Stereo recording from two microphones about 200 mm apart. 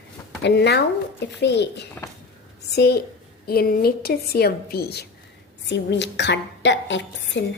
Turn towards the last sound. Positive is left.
turn(degrees=65)  # may be behind; listen again after turning